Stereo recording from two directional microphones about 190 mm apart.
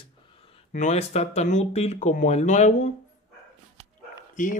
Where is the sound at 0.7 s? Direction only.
40° left (ahead or behind).